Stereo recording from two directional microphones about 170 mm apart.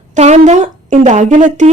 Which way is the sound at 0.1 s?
40° right (ahead or behind).